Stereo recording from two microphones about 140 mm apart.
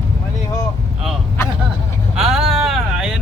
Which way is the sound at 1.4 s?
20° left (ahead or behind).